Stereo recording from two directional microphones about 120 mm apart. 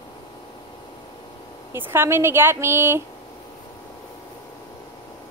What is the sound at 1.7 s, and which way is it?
Speech, 20° right (ahead or behind).